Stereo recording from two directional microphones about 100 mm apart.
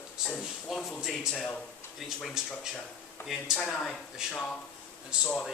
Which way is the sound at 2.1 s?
5° right (ahead or behind).